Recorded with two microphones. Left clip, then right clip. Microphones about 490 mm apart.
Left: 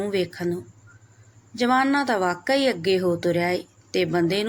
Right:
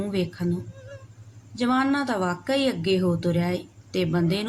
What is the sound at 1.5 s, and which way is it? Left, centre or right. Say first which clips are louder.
Speech: left 3 dB; right.